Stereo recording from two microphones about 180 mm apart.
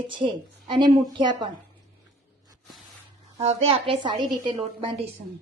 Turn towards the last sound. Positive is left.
turn(degrees=-25)  # may be behind; listen again after turning